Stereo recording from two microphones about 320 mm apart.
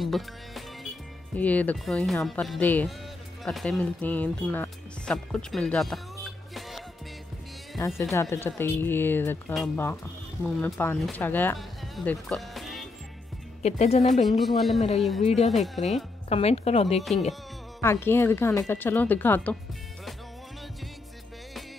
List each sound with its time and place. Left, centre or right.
0.0 s speech: centre
13.6 s speech: centre
14.4 s speech: centre
15.2 s speech: centre
15.5 s speech: centre
16.3 s speech: centre
17.8 s speech: centre